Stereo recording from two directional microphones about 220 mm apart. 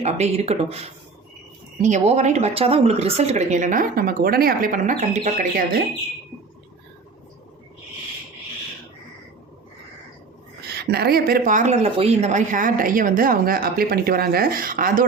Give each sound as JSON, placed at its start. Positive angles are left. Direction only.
{"t": 0.0, "sound": "speech", "side_deg": -30}
{"t": 1.8, "sound": "speech", "side_deg": -30}
{"t": 10.7, "sound": "speech", "side_deg": -45}